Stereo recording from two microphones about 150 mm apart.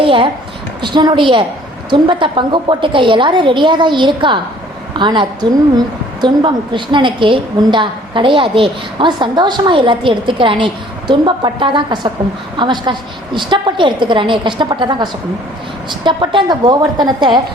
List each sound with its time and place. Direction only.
0.0 s a child's voice: 35° right (ahead or behind)